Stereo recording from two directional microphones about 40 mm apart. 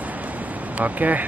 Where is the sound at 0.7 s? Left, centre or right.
Right.